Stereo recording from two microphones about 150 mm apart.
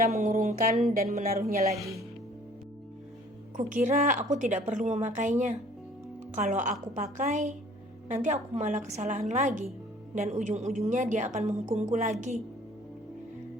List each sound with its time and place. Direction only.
0.1 s a woman's voice: 55° right (ahead or behind)
1.0 s a woman's voice: 50° right (ahead or behind)
1.3 s speech: 75° right (ahead or behind)
3.6 s a woman's voice: 55° right (ahead or behind)